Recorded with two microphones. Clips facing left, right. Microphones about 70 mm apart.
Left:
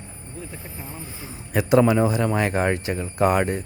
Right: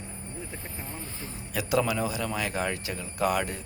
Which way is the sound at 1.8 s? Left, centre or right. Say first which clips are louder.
Left 9 dB; left.